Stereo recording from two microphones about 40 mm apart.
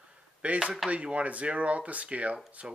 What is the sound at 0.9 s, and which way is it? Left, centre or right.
Speech, right.